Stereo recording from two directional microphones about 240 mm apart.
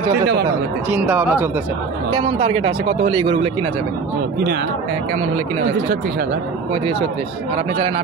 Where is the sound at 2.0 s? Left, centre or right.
Right.